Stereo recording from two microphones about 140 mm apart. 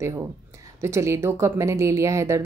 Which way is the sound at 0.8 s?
20° right (ahead or behind).